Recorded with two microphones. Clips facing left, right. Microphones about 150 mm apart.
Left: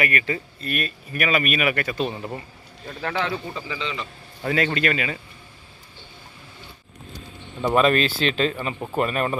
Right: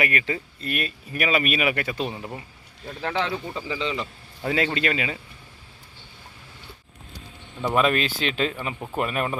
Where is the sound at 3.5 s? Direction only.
35° right (ahead or behind).